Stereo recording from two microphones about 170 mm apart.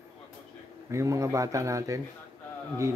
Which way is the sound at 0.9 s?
20° right (ahead or behind).